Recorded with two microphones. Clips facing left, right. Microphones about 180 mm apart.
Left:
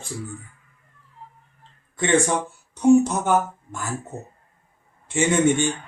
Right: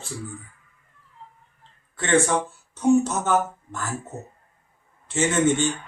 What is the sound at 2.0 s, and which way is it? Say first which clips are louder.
A woman's voice: left 1 dB; 15° left (ahead or behind).